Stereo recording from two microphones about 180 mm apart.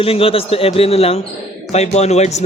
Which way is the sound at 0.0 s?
30° left (ahead or behind).